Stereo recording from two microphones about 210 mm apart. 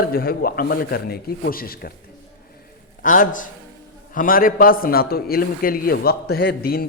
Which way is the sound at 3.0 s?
40° left (ahead or behind).